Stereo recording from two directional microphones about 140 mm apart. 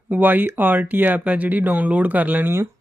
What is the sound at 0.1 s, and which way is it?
Speech, 10° right (ahead or behind).